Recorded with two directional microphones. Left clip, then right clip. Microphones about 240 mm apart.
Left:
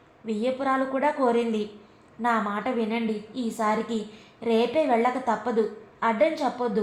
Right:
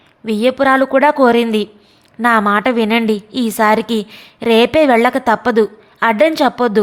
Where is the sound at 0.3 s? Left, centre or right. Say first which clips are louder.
Right 13 dB; right.